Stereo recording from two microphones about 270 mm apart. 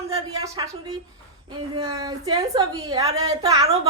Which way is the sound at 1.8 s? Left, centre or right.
Centre.